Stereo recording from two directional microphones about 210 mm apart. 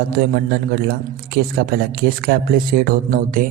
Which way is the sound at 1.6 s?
45° right (ahead or behind).